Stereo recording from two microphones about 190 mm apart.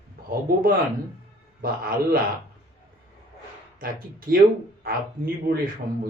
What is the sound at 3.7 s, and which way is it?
Speech, 50° right (ahead or behind).